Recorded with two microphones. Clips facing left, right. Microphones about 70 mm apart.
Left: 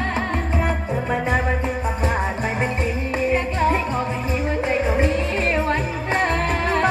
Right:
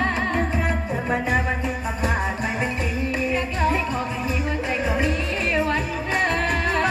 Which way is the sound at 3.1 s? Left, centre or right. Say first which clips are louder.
Left 5 dB; left.